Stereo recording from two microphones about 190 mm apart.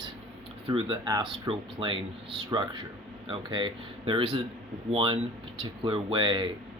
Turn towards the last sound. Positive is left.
turn(degrees=-25)  # may be behind; listen again after turning